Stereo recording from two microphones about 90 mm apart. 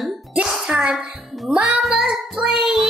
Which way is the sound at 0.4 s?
10° right (ahead or behind).